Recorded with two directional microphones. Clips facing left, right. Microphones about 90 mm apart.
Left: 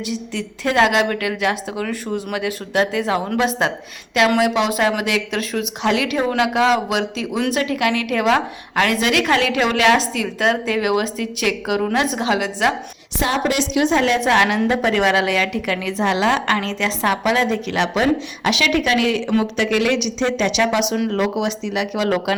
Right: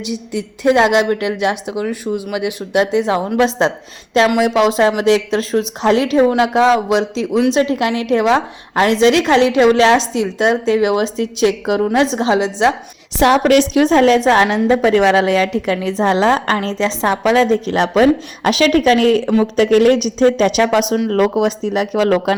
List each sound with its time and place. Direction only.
0.0 s a woman's voice: 20° right (ahead or behind)
2.0 s speech: 5° right (ahead or behind)
2.3 s a woman's voice: 15° right (ahead or behind)
13.1 s a woman's voice: 75° right (ahead or behind); by 13.7 s 55° right (ahead or behind)
13.7 s a woman's voice: 45° right (ahead or behind)